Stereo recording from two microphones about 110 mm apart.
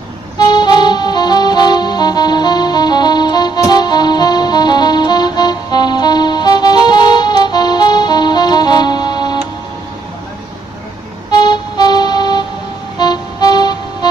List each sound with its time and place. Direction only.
0.5 s music: 40° left (ahead or behind)
11.2 s music: 40° left (ahead or behind)